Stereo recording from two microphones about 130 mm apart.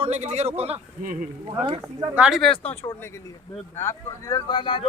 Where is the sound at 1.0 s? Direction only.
90° right.